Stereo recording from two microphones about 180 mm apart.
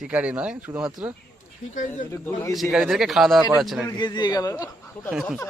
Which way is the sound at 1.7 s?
45° left (ahead or behind).